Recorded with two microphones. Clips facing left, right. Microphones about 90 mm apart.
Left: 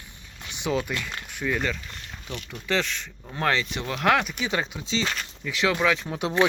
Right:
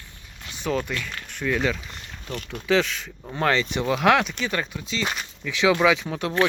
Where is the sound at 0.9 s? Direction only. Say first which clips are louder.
Right 1 dB; 20° left (ahead or behind); by 2.0 s centre (ahead or behind).